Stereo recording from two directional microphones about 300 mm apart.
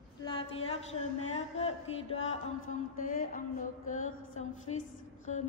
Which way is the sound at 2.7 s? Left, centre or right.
Left.